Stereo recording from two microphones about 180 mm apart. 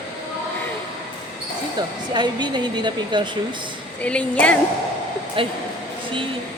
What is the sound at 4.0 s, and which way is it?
Speech, 5° left (ahead or behind).